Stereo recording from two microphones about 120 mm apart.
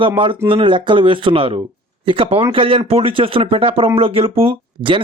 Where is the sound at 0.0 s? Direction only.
45° right (ahead or behind).